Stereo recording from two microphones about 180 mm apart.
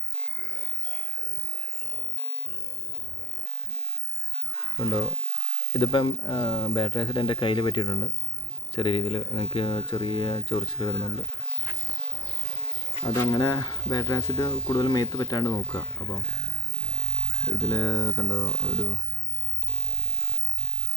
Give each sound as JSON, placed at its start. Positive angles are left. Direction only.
{"t": 4.8, "sound": "speech", "side_deg": 25}
{"t": 13.1, "sound": "speech", "side_deg": 20}
{"t": 17.5, "sound": "speech", "side_deg": 20}